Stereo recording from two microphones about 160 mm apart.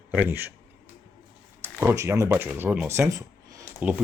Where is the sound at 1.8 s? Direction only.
15° right (ahead or behind).